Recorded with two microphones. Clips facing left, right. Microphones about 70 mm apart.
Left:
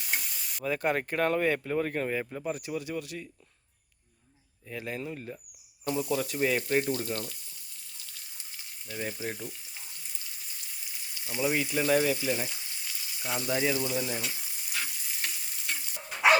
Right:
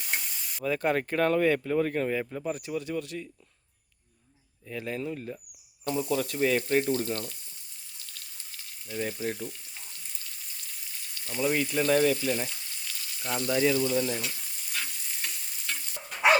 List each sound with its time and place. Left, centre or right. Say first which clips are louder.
0.0 s frying: even; centre
0.6 s speech: right 2 dB; centre
4.7 s speech: right 3 dB; centre
8.9 s frying: right 3 dB; centre